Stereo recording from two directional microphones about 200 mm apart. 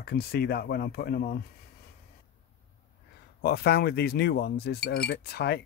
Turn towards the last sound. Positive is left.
turn(degrees=55)  # may be behind; listen again after turning